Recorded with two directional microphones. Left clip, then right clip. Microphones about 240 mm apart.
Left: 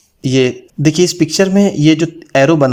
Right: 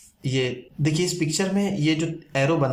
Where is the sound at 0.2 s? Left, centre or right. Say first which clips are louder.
Left 12 dB; left.